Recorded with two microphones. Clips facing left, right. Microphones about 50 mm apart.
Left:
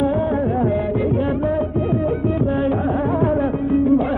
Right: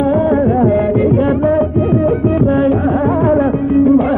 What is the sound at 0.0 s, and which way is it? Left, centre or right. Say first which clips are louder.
Music of bollywood: right 7 dB; right.